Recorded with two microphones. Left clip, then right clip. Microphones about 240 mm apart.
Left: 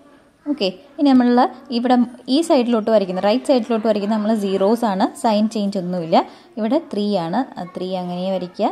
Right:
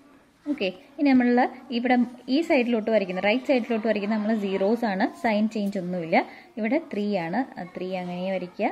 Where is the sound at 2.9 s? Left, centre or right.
Left.